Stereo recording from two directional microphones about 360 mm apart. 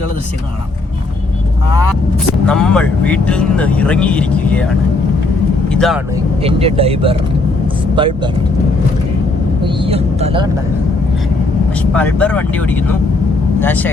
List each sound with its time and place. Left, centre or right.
2.5 s speech: centre
6.4 s speech: centre
9.6 s speech: centre
11.8 s speech: centre